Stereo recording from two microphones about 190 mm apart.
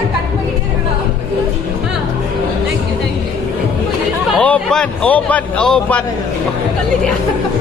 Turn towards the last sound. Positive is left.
turn(degrees=5)  # may be behind; listen again after turning